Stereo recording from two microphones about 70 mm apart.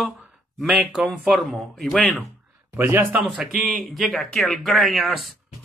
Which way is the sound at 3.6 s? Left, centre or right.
Centre.